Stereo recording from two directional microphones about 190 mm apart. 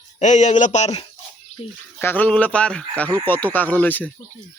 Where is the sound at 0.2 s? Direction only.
40° left (ahead or behind).